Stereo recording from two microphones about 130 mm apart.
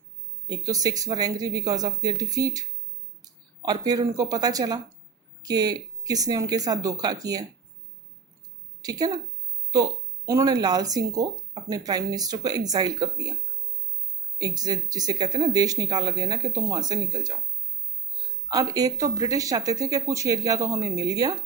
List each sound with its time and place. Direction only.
0.4 s speech: 30° right (ahead or behind)
8.8 s a woman's voice: 30° right (ahead or behind)
14.3 s speech: 30° right (ahead or behind)
18.4 s speech: 30° right (ahead or behind)